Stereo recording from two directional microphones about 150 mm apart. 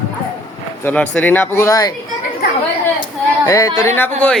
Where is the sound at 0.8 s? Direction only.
10° left (ahead or behind).